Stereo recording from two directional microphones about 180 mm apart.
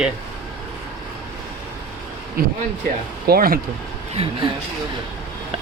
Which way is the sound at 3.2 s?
55° right (ahead or behind).